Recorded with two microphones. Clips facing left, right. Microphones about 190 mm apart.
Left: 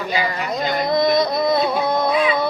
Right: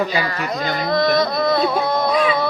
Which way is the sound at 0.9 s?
20° left (ahead or behind).